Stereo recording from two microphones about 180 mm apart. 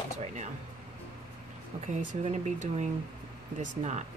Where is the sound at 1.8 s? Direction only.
45° right (ahead or behind).